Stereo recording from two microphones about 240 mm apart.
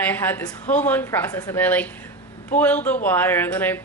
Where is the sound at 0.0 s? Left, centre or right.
Centre.